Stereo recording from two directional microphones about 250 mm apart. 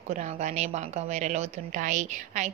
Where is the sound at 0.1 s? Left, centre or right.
Right.